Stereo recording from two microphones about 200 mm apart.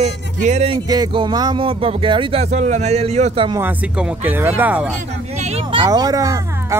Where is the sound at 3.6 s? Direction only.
5° right (ahead or behind).